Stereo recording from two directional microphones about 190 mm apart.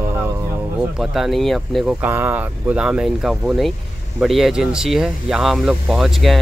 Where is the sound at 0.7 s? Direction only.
5° right (ahead or behind).